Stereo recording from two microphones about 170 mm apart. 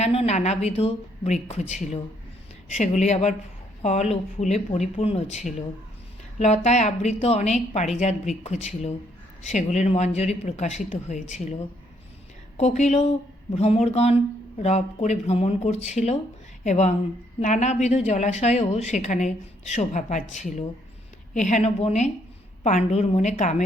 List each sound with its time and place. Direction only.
0.0 s a woman's voice: 40° left (ahead or behind)
6.4 s a woman's voice: 40° left (ahead or behind)
12.5 s a woman's voice: 40° left (ahead or behind)